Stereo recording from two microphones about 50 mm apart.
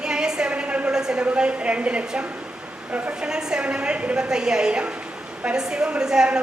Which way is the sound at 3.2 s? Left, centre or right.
Centre.